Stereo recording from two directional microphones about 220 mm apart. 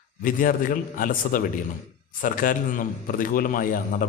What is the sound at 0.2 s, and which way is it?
A man's voice, 40° left (ahead or behind).